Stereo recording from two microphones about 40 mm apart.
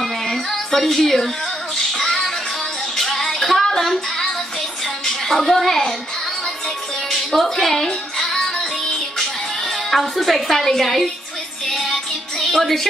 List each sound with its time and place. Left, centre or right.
0.0 s a sound: centre
1.8 s music: centre
3.0 s child singing: centre
5.0 s a woman's voice: centre
7.1 s music: centre
8.5 s music: centre
9.2 s music: centre